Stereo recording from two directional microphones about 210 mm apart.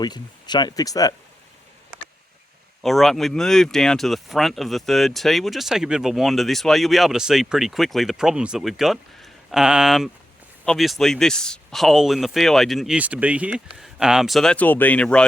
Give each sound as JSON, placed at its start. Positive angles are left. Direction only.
{"t": 0.0, "sound": "speech", "side_deg": 20}
{"t": 2.8, "sound": "speech", "side_deg": 0}